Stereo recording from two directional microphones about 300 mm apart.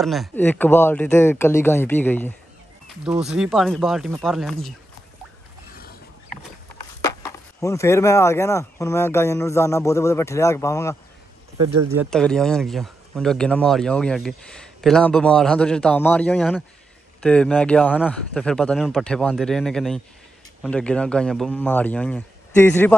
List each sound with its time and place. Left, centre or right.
0.0 s speech: centre
5.8 s mechanisms: left
7.6 s speech: centre
12.0 s speech: centre